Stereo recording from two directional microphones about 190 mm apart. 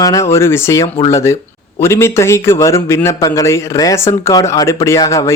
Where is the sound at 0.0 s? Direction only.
15° left (ahead or behind).